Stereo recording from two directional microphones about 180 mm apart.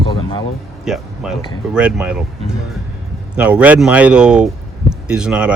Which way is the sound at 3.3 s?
5° right (ahead or behind).